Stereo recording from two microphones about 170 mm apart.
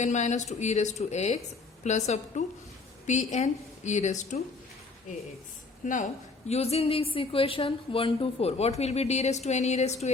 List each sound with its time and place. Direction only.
0.0 s a woman's voice: 45° left (ahead or behind)
5.8 s a woman's voice: 45° left (ahead or behind)
6.5 s a woman's voice: 35° left (ahead or behind)